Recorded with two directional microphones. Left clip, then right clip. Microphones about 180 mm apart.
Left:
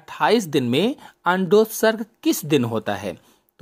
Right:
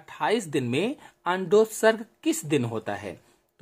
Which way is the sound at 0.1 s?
30° left (ahead or behind).